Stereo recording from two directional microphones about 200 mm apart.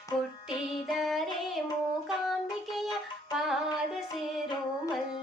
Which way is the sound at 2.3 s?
Centre (ahead or behind).